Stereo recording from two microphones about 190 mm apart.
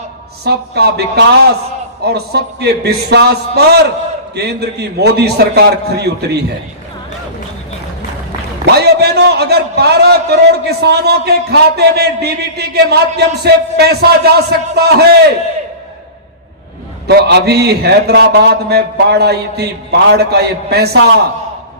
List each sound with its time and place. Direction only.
0.4 s a man's voice: 60° right (ahead or behind)
8.6 s a man's voice: 60° right (ahead or behind)
17.1 s a man's voice: 60° right (ahead or behind)